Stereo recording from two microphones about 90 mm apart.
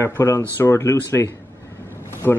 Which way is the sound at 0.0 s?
35° left (ahead or behind).